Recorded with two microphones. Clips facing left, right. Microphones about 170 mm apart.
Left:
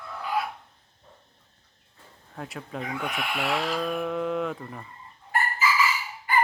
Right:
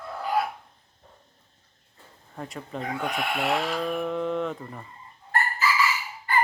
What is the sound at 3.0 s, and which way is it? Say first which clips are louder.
Speech: right 5 dB; 35° right (ahead or behind).